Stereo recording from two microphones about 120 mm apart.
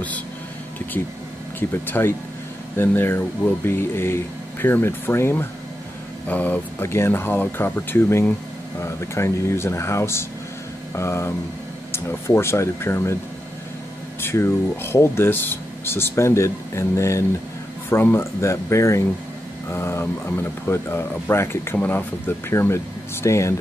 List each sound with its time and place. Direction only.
1.9 s speech: 20° left (ahead or behind)
14.2 s speech: 20° left (ahead or behind)